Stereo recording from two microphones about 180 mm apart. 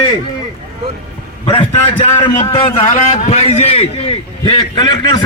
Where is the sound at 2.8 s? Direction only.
40° left (ahead or behind); by 5.2 s 25° left (ahead or behind).